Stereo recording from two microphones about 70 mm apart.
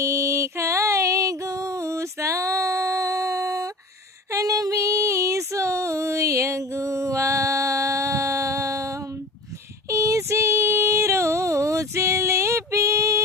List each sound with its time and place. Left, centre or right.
0.0 s music: right
4.3 s female singing: right